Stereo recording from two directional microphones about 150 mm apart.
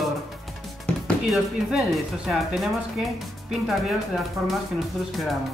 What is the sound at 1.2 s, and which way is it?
Speech, centre (ahead or behind).